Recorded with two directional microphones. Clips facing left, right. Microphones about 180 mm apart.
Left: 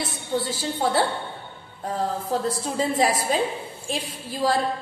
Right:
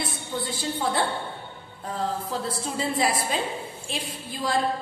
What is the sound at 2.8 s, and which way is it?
Speech, 45° left (ahead or behind).